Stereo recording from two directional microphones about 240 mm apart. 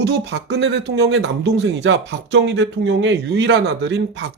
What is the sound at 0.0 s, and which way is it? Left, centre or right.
A man's voice, right.